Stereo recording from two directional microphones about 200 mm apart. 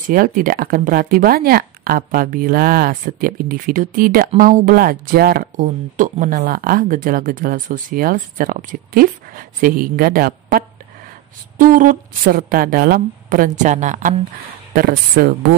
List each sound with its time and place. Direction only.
0.1 s speech: 45° right (ahead or behind)